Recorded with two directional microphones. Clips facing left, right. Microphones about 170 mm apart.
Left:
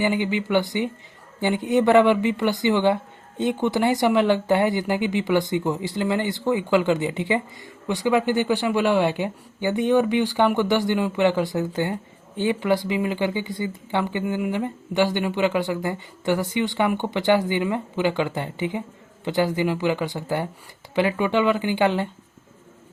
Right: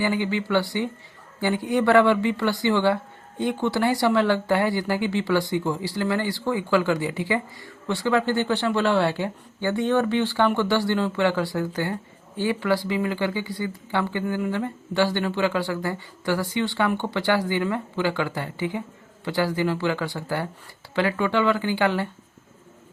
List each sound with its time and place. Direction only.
0.0 s speech: 20° left (ahead or behind)